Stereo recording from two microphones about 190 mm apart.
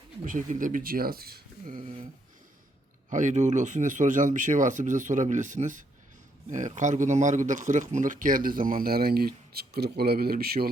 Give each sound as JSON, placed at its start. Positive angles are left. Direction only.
{"t": 0.3, "sound": "speech", "side_deg": -40}
{"t": 3.1, "sound": "speech", "side_deg": -40}